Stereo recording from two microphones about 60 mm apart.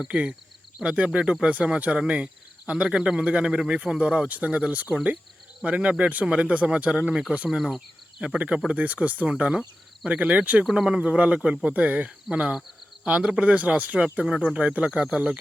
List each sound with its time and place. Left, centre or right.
0.0 s speech: centre
2.9 s speech: centre
10.6 s speech: centre